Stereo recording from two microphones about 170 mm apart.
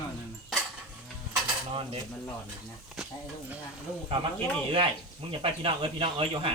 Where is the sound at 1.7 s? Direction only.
30° right (ahead or behind).